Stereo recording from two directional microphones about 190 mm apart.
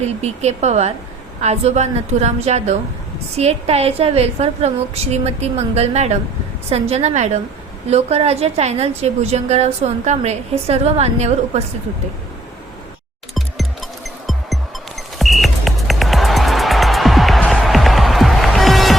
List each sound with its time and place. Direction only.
0.0 s a woman's voice: 35° right (ahead or behind)
14.3 s music: centre (ahead or behind)